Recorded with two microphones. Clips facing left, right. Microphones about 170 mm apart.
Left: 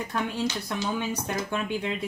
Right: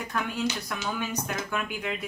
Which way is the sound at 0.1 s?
30° left (ahead or behind).